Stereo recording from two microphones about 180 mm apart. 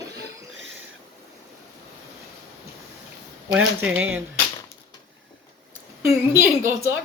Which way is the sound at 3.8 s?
10° right (ahead or behind).